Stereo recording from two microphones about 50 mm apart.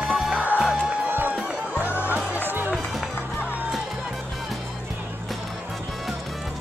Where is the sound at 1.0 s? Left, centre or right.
Right.